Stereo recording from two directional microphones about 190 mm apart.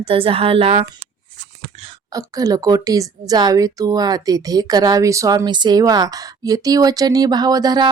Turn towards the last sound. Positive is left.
turn(degrees=-20)  # may be behind; listen again after turning